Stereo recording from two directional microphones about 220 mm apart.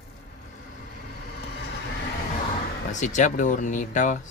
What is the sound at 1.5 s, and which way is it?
Vehicle, 50° left (ahead or behind).